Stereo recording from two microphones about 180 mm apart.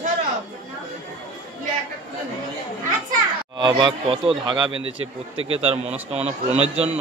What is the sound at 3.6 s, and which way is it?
A man's voice, 25° right (ahead or behind).